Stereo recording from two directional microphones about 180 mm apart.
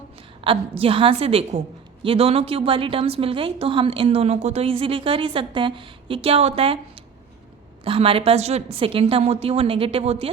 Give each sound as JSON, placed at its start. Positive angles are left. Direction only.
{"t": 0.4, "sound": "a woman's voice", "side_deg": -30}
{"t": 7.9, "sound": "a woman's voice", "side_deg": -30}